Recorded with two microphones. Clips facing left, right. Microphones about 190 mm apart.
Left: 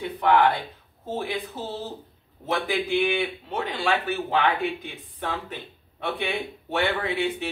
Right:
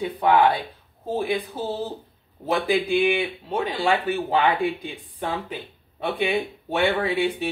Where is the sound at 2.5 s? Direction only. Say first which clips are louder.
Right 3 dB; 10° right (ahead or behind).